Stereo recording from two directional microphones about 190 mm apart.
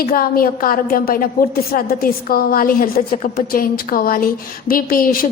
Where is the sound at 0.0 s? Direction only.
50° left (ahead or behind).